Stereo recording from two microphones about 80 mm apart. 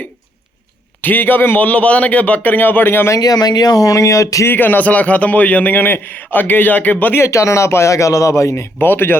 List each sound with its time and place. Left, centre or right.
1.0 s a man's voice: left
3.2 s speech: left
4.4 s a man's voice: left
7.3 s speech: left